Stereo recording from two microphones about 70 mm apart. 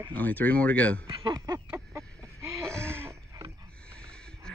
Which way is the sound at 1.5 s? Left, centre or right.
Right.